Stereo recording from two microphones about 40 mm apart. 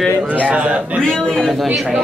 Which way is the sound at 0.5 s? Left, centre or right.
Right.